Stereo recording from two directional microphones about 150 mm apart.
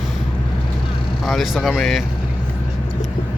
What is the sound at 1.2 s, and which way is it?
Speech, centre (ahead or behind).